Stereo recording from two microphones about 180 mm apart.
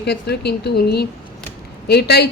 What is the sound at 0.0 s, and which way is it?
A woman's voice, 65° left (ahead or behind).